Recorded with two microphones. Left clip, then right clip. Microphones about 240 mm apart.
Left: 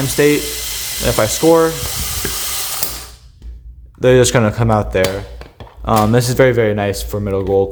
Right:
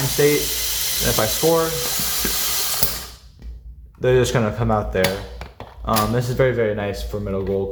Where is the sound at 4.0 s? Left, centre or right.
Left.